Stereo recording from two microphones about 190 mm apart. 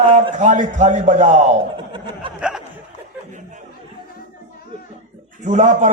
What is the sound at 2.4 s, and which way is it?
Speech, 5° right (ahead or behind).